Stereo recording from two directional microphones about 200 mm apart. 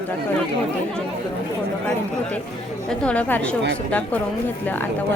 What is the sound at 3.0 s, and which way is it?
Speech, 5° left (ahead or behind).